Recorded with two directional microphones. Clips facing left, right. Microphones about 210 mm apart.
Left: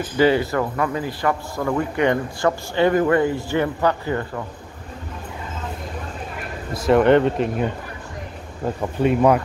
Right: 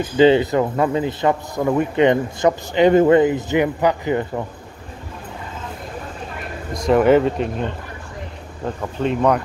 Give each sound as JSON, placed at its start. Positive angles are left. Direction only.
{"t": 0.2, "sound": "a man's voice", "side_deg": -20}
{"t": 6.7, "sound": "speech", "side_deg": 5}